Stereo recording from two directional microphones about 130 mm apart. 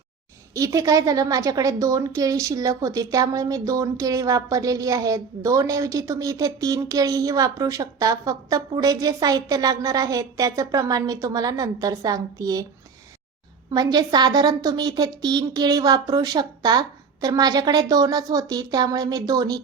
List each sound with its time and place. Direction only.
0.5 s a woman's voice: 25° right (ahead or behind)
13.7 s a woman's voice: 30° right (ahead or behind)